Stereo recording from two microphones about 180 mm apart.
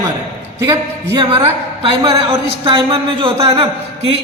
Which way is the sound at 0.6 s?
25° right (ahead or behind).